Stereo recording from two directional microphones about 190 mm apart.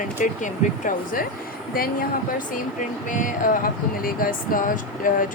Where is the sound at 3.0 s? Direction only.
45° left (ahead or behind).